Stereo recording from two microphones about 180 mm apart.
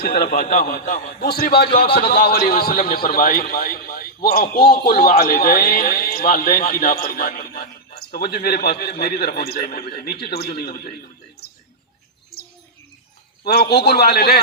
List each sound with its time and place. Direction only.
0.0 s a man's voice: 60° left (ahead or behind)
13.4 s a man's voice: 60° left (ahead or behind)